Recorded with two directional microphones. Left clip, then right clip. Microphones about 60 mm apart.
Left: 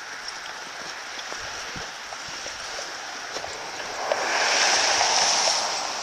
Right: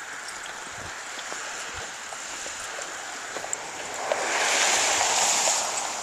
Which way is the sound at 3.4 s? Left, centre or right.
Centre.